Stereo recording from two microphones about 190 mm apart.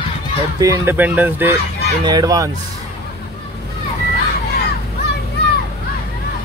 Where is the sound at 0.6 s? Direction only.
15° right (ahead or behind).